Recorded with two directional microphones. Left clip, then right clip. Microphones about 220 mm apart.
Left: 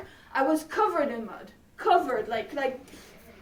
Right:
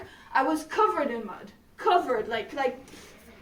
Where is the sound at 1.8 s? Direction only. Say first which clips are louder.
Even; centre (ahead or behind).